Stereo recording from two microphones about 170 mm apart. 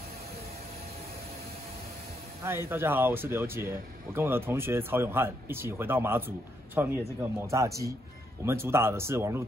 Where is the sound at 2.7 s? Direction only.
10° right (ahead or behind).